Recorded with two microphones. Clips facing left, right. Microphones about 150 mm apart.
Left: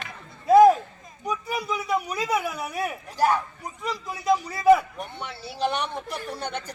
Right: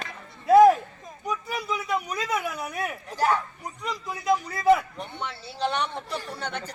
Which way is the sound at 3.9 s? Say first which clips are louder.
Left 1 dB; 5° left (ahead or behind).